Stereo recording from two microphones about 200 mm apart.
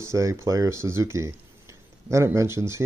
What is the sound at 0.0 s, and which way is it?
Speech, 15° right (ahead or behind).